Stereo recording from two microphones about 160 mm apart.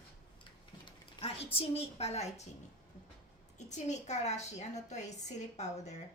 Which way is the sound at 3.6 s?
45° left (ahead or behind).